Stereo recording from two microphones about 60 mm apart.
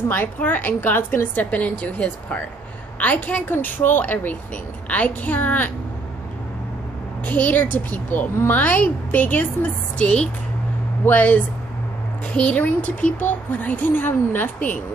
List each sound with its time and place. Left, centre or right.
0.1 s speech: left
7.2 s speech: left